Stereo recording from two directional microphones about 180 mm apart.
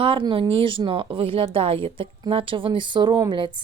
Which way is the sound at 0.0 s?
30° right (ahead or behind).